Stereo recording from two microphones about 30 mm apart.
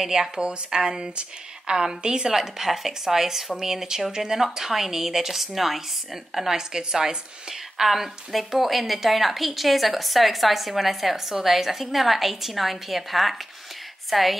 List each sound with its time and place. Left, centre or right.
0.4 s a woman's voice: right; by 5.8 s centre
6.5 s a woman's voice: right
7.7 s a woman's voice: centre